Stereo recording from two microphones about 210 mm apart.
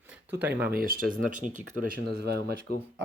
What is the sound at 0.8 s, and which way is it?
Speech, 45° right (ahead or behind).